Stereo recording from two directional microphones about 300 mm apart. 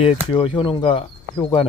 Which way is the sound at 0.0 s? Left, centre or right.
Centre.